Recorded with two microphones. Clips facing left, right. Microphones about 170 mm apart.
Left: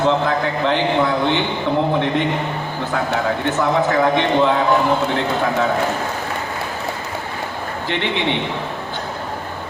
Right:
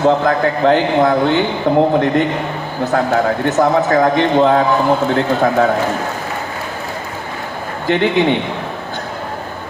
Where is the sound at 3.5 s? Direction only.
40° right (ahead or behind).